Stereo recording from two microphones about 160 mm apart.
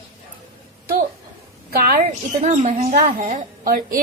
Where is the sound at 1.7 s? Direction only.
65° right (ahead or behind).